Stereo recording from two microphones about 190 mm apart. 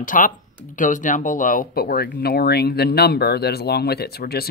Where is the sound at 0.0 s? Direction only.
45° left (ahead or behind).